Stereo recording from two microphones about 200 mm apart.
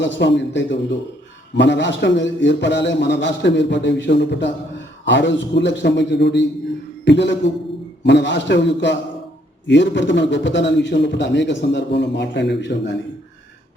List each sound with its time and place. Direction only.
0.0 s a man's voice: 60° left (ahead or behind)